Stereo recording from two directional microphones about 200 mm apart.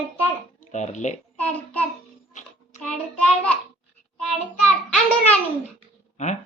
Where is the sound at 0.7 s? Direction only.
35° left (ahead or behind).